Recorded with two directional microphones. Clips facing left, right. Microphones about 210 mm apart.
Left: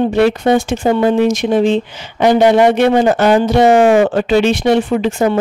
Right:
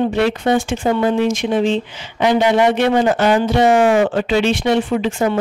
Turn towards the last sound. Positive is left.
turn(degrees=40)  # may be behind; listen again after turning